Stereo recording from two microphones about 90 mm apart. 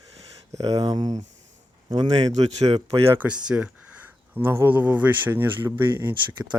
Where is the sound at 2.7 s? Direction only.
75° right (ahead or behind).